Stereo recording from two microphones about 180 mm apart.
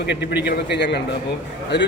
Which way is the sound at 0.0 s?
65° left (ahead or behind).